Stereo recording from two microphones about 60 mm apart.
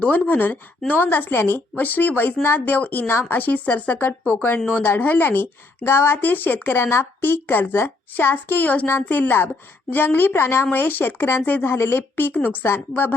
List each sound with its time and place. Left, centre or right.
0.0 s speech: left
3.1 s speech: left
3.3 s speech: left